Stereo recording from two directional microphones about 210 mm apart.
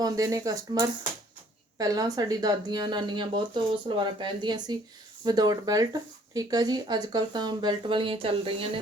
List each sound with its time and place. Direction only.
0.0 s speech: 15° right (ahead or behind)